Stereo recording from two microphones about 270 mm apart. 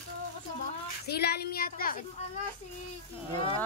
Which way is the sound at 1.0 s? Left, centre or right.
Left.